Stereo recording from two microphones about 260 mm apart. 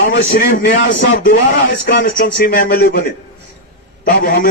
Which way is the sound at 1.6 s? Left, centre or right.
Left.